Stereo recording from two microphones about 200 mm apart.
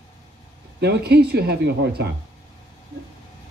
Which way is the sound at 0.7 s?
55° right (ahead or behind).